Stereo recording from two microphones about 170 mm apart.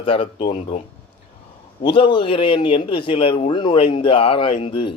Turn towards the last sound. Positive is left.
turn(degrees=35)  # may be behind; listen again after turning